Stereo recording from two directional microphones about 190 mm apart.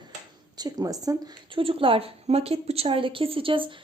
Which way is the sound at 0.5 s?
20° right (ahead or behind).